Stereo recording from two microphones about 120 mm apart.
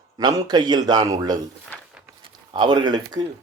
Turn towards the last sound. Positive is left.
turn(degrees=-35)  # may be behind; listen again after turning